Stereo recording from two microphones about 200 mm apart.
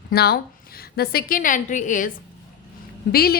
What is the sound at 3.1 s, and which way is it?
Speech, 50° left (ahead or behind).